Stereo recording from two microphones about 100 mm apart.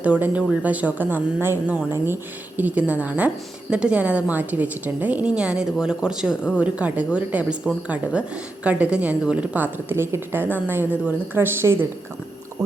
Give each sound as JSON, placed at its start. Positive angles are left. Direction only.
{"t": 0.0, "sound": "a woman's voice", "side_deg": -15}